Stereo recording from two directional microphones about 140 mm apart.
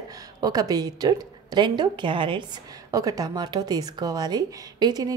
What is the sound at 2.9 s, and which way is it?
A woman's voice, 25° right (ahead or behind).